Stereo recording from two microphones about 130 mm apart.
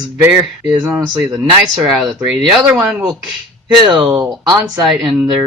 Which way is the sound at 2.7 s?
10° right (ahead or behind).